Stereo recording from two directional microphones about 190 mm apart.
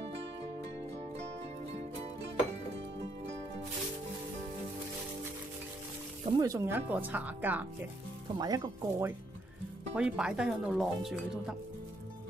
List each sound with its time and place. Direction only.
6.2 s speech: 20° right (ahead or behind)
8.4 s speech: 20° right (ahead or behind)
9.9 s speech: 5° right (ahead or behind)